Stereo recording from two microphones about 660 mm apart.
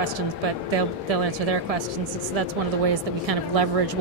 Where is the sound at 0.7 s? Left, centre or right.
Right.